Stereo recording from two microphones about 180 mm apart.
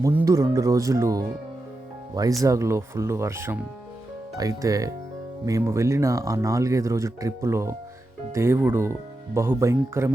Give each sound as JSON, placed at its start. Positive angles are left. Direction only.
{"t": 0.0, "sound": "speech", "side_deg": -15}
{"t": 2.4, "sound": "speech", "side_deg": -15}